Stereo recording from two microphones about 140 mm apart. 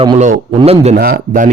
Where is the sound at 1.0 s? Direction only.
90° right.